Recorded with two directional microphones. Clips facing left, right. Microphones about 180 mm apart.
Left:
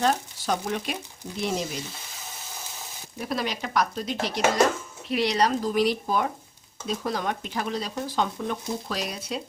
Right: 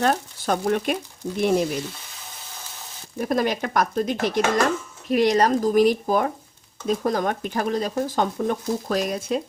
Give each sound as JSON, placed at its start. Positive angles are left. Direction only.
{"t": 0.0, "sound": "speech", "side_deg": -55}
{"t": 3.2, "sound": "speech", "side_deg": -50}